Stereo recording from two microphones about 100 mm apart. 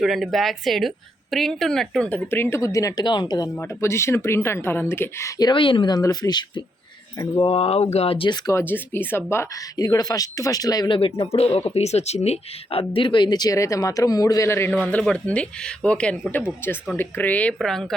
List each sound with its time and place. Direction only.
0.0 s a woman's voice: centre (ahead or behind)
2.0 s speech: 20° left (ahead or behind)
3.1 s speech: 45° left (ahead or behind)
3.6 s speech: 25° left (ahead or behind)
5.4 s speech: 50° left (ahead or behind)
6.0 s speech: 40° left (ahead or behind)
7.4 s speech: 75° left (ahead or behind)
8.6 s speech: 20° left (ahead or behind)
9.7 s speech: 40° left (ahead or behind)
10.8 s speech: 60° left (ahead or behind); by 14.7 s 25° left (ahead or behind)
14.7 s speech: 15° left (ahead or behind)
17.6 s a woman's voice: 5° left (ahead or behind)